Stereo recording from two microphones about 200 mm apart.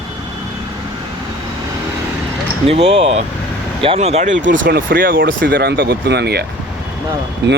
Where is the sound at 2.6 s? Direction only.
30° right (ahead or behind).